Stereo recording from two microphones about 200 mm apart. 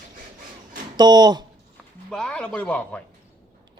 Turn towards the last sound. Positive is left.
turn(degrees=5)  # may be behind; listen again after turning